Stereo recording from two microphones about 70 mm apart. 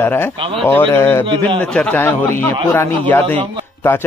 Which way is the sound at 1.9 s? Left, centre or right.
Left.